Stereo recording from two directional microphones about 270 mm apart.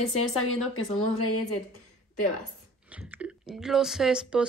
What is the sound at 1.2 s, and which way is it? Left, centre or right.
Speech, left.